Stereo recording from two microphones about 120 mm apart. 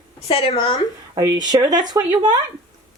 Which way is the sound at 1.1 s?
35° right (ahead or behind).